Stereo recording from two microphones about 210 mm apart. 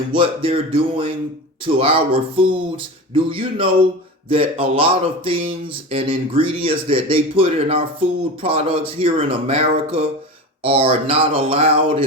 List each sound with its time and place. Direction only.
0.1 s speech: 25° right (ahead or behind)